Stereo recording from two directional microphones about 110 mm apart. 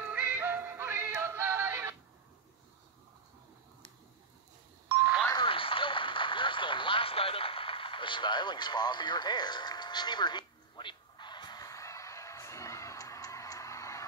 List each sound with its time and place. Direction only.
0.0 s synthetic singing: 15° right (ahead or behind)
4.8 s ding: 20° right (ahead or behind)
5.3 s a sound: 50° left (ahead or behind); by 14.0 s 25° left (ahead or behind)